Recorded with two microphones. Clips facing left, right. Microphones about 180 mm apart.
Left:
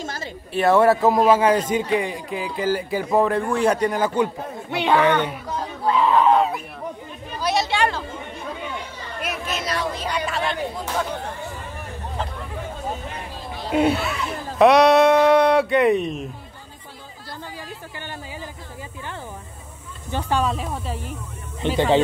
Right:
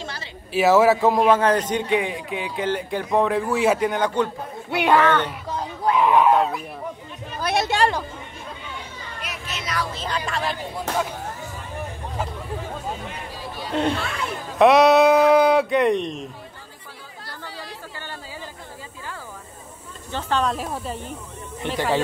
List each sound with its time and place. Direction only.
0.0 s a sound: 45° left (ahead or behind)
0.5 s a man's voice: 5° right (ahead or behind)
4.6 s speech: 10° right (ahead or behind)
5.0 s speech: 15° left (ahead or behind)
5.9 s a sound: 15° right (ahead or behind)
6.3 s goose: centre (ahead or behind)
7.3 s a sound: 55° right (ahead or behind)
9.2 s a sound: 50° left (ahead or behind)
9.9 s a man's voice: 10° left (ahead or behind)
13.7 s speech: 5° left (ahead or behind)
20.1 s speech: 15° left (ahead or behind)
20.5 s a man's voice: centre (ahead or behind)
21.6 s speech: 20° left (ahead or behind)